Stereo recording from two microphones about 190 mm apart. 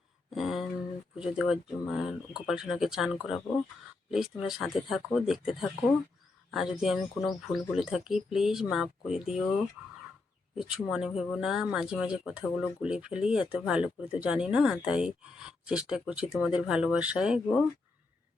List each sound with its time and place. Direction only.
0.3 s a sound: centre (ahead or behind)
1.2 s speech: 5° right (ahead or behind)
10.6 s speech: 5° right (ahead or behind)